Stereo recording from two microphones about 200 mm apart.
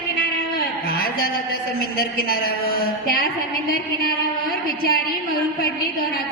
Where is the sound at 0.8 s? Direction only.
50° left (ahead or behind).